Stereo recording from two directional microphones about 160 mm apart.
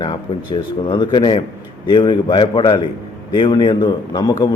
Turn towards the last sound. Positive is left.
turn(degrees=25)  # may be behind; listen again after turning